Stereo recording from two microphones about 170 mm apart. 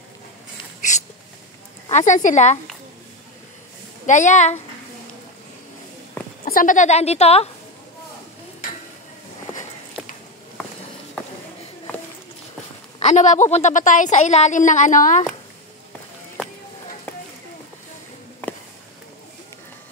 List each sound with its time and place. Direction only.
0.7 s a sound: 45° left (ahead or behind)
1.9 s a woman's voice: 45° left (ahead or behind)
4.0 s a woman's voice: 45° left (ahead or behind)
6.4 s a woman's voice: 55° left (ahead or behind); by 7.4 s 40° left (ahead or behind)
13.0 s a woman's voice: 45° left (ahead or behind)